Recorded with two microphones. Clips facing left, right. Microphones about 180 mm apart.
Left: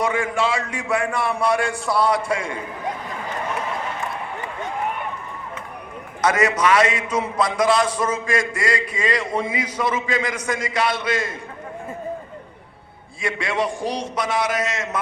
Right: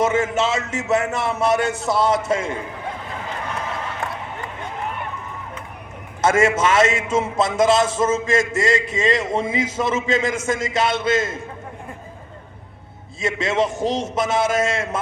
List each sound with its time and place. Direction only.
0.0 s a man's voice: 25° right (ahead or behind)
6.2 s a man's voice: 25° right (ahead or behind)
13.2 s a man's voice: 25° right (ahead or behind)